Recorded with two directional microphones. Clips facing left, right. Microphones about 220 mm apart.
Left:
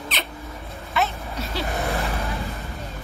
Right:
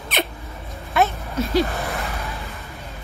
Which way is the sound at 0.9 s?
45° right (ahead or behind).